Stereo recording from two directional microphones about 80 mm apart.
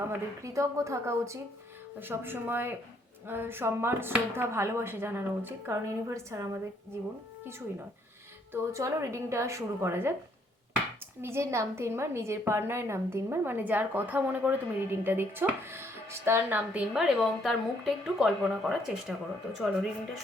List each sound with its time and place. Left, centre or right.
0.4 s a woman's voice: right
2.0 s speech: right
8.5 s a woman's voice: right
11.2 s a woman's voice: right
16.9 s a woman's voice: centre